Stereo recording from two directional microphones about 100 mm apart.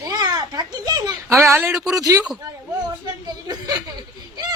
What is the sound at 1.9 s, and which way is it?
A woman's voice, 35° right (ahead or behind).